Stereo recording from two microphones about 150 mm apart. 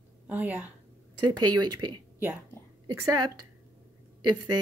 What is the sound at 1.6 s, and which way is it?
Speech, 30° right (ahead or behind).